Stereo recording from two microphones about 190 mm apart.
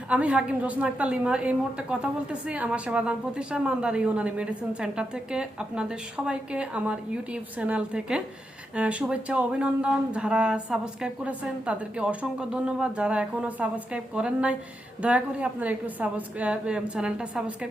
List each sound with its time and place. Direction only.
0.1 s a woman's voice: 5° right (ahead or behind)